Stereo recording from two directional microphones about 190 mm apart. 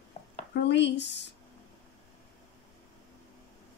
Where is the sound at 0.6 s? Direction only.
65° left (ahead or behind).